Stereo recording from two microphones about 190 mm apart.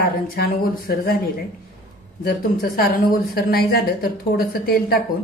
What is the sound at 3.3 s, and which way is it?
A woman's voice, 55° left (ahead or behind).